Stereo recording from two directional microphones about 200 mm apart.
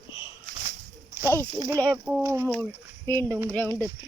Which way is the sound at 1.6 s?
20° right (ahead or behind).